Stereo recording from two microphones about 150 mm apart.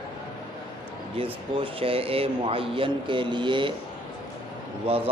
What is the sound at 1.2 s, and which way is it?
Speech, 35° right (ahead or behind).